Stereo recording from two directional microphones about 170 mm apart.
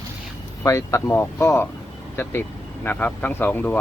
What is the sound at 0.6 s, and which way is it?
Speech, 20° left (ahead or behind).